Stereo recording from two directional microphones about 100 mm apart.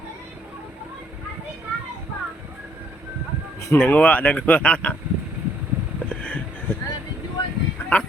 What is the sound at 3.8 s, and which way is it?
Speech, 15° left (ahead or behind).